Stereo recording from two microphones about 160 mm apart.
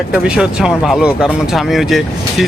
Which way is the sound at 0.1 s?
5° right (ahead or behind).